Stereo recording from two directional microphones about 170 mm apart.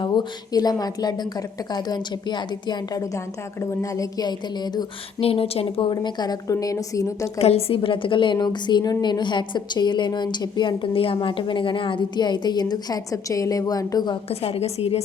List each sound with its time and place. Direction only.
0.0 s a woman's voice: 25° left (ahead or behind)
7.3 s a woman's voice: 35° left (ahead or behind)